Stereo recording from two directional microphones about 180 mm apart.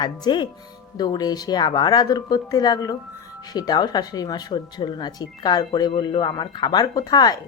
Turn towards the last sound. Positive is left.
turn(degrees=20)  # may be behind; listen again after turning